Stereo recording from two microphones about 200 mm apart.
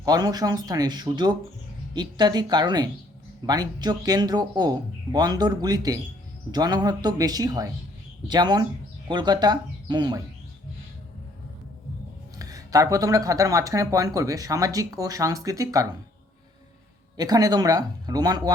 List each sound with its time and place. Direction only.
0.0 s speech: 20° right (ahead or behind)
12.4 s speech: 15° right (ahead or behind)
17.2 s speech: 20° right (ahead or behind)